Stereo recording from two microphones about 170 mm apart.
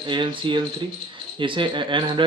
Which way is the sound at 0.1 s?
30° right (ahead or behind).